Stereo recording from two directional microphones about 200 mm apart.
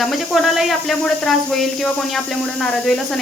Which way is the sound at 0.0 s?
Centre (ahead or behind).